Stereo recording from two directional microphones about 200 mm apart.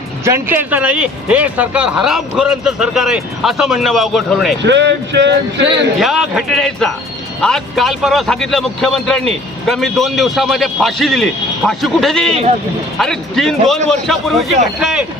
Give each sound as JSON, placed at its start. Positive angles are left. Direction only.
{"t": 0.3, "sound": "speech", "side_deg": -10}
{"t": 4.6, "sound": "a sound", "side_deg": -60}
{"t": 6.0, "sound": "speech", "side_deg": 0}